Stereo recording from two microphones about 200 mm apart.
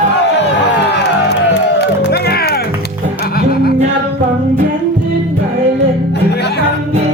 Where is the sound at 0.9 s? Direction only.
55° left (ahead or behind).